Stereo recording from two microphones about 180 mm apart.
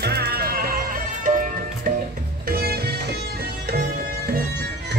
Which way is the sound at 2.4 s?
60° right (ahead or behind).